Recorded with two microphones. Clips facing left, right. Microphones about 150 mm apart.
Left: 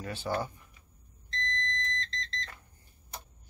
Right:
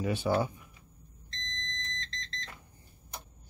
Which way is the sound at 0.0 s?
15° right (ahead or behind).